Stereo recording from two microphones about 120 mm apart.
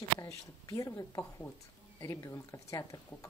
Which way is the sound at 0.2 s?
30° left (ahead or behind).